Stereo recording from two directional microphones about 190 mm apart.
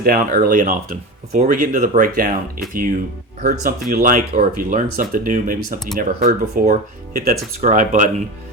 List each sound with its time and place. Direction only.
0.0 s speech: 50° right (ahead or behind)